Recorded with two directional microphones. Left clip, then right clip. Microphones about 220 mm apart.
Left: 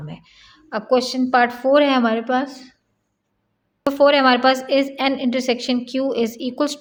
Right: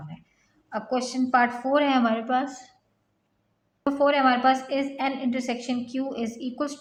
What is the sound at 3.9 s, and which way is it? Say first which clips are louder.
A woman's voice: left 7 dB; 50° left (ahead or behind).